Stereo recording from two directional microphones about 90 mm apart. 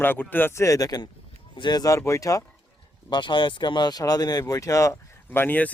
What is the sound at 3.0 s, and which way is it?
Speech, 60° left (ahead or behind).